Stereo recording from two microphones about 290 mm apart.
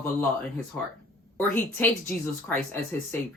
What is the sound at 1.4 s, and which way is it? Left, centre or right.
Speech, centre.